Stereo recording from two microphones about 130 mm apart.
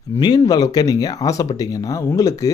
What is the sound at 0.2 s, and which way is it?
Speech, 30° left (ahead or behind).